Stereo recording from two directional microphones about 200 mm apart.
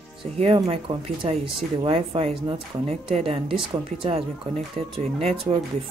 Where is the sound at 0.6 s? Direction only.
30° right (ahead or behind).